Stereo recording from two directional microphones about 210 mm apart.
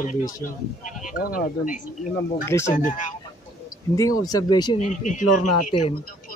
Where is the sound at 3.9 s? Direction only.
15° left (ahead or behind).